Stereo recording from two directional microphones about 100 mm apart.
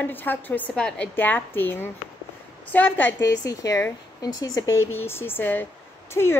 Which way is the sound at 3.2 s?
35° left (ahead or behind).